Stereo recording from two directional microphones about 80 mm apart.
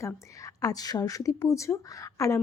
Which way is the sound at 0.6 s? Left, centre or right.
Left.